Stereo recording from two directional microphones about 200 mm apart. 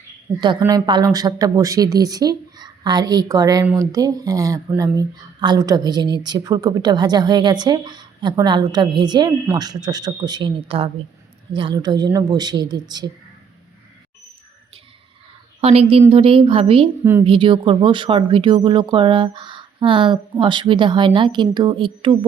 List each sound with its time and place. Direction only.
0.3 s speech: 25° right (ahead or behind)
15.6 s speech: 30° right (ahead or behind)
17.0 s speech: 10° right (ahead or behind)
17.2 s speech: 25° right (ahead or behind)